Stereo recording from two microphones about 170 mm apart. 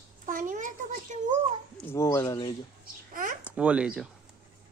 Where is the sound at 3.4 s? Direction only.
5° right (ahead or behind).